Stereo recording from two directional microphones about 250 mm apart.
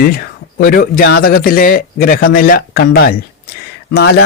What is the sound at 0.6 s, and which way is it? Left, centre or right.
A man's voice, left.